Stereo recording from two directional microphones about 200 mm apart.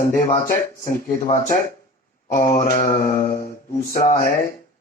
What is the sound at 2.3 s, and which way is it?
Speech, 40° left (ahead or behind).